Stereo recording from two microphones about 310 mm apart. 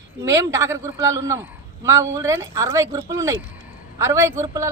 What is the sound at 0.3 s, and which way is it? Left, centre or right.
A man's voice, centre.